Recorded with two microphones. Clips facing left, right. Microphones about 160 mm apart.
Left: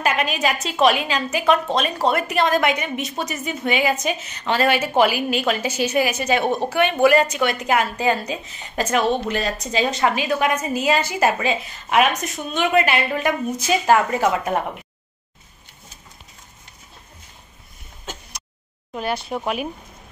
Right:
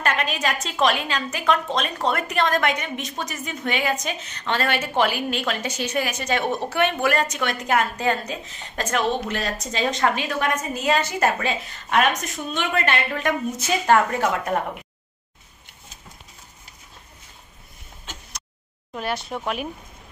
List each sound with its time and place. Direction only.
0.0 s a woman's voice: 5° left (ahead or behind)
18.9 s a woman's voice: centre (ahead or behind)